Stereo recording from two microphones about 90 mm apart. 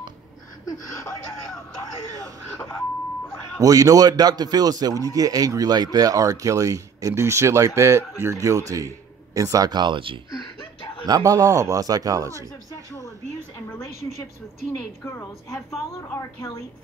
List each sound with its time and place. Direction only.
2.5 s throat clearing: 30° left (ahead or behind)
3.5 s speech: 40° right (ahead or behind); by 10.1 s 65° right (ahead or behind)
10.6 s a sound: 65° left (ahead or behind)
11.1 s speech: 45° right (ahead or behind)
16.2 s a woman's voice: 35° left (ahead or behind)